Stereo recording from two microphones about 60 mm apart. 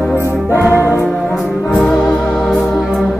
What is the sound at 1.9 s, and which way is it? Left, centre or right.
Music, centre.